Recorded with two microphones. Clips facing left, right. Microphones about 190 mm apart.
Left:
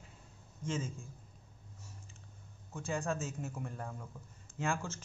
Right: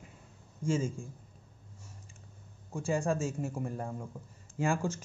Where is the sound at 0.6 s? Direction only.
30° right (ahead or behind).